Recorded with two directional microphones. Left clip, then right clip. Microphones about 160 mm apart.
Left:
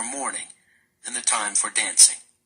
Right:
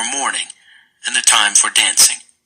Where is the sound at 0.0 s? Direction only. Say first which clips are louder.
Right 11 dB; 5° right (ahead or behind).